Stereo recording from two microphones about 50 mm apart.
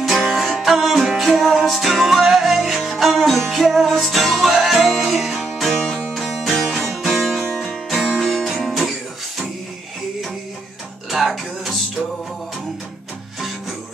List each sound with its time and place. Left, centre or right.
0.0 s music: centre
5.8 s music: centre
6.2 s music: centre
11.1 s music: centre